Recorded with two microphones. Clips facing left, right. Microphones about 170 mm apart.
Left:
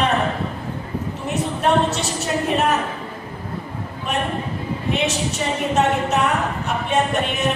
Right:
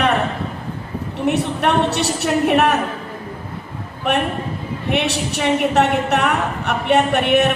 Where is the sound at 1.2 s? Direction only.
65° right (ahead or behind).